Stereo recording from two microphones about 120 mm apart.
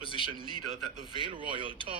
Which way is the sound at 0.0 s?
45° left (ahead or behind).